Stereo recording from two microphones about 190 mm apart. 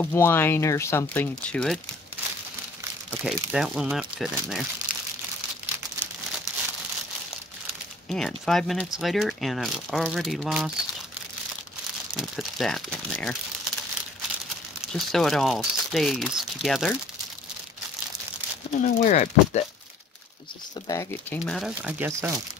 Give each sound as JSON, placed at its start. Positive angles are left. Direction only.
{"t": 0.0, "sound": "speech", "side_deg": 10}
{"t": 3.3, "sound": "speech", "side_deg": -5}
{"t": 4.9, "sound": "crumpling", "side_deg": -5}
{"t": 8.1, "sound": "speech", "side_deg": 0}
{"t": 12.2, "sound": "speech", "side_deg": 0}
{"t": 14.9, "sound": "speech", "side_deg": 0}
{"t": 18.8, "sound": "speech", "side_deg": 45}
{"t": 20.8, "sound": "speech", "side_deg": 15}